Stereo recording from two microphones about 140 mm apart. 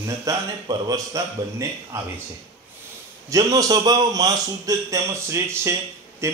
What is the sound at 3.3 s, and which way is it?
A man's voice, 25° right (ahead or behind).